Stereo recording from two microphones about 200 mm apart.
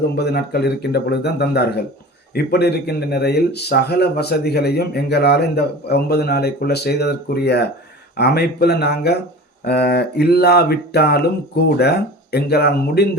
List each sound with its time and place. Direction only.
0.2 s speech: 55° left (ahead or behind)